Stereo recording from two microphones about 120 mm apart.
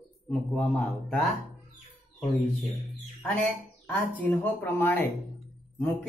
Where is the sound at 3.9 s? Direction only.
15° left (ahead or behind).